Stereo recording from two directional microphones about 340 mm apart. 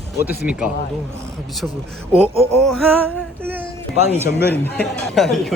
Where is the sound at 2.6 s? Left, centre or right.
Centre.